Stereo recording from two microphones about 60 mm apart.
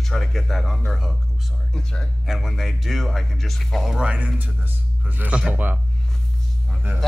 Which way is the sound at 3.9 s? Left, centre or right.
Centre.